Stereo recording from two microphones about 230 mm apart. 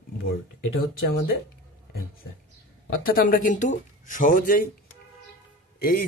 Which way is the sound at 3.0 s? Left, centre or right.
Left.